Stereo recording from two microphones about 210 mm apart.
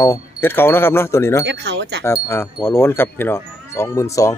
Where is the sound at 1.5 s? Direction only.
55° right (ahead or behind).